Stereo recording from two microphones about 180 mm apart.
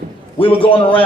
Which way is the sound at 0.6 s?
30° left (ahead or behind).